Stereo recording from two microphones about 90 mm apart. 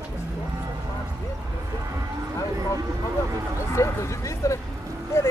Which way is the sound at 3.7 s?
35° left (ahead or behind).